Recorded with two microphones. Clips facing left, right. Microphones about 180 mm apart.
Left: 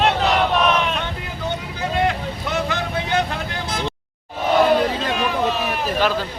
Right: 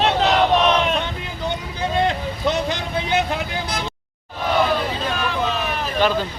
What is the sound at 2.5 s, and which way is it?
Vehicle, 20° right (ahead or behind).